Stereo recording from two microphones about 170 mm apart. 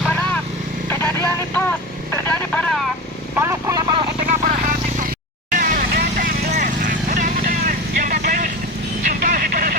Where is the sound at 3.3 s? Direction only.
15° right (ahead or behind).